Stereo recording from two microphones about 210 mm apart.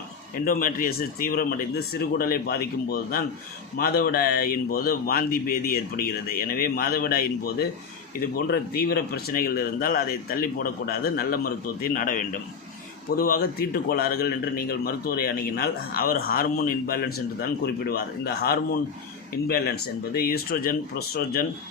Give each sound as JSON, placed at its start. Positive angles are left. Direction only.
{"t": 0.4, "sound": "speech", "side_deg": 40}